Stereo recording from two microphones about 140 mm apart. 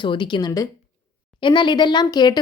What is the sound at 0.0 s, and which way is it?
Speech, 35° left (ahead or behind).